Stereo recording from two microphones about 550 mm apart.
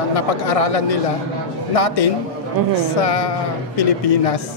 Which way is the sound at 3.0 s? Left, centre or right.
Left.